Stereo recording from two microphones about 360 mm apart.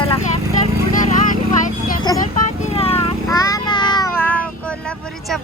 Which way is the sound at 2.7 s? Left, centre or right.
Centre.